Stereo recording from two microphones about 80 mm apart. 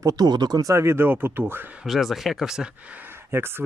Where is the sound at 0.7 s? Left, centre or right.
Right.